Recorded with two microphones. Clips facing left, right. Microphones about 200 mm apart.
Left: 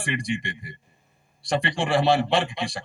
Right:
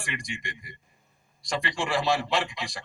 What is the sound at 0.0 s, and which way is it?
A man's voice, 30° left (ahead or behind).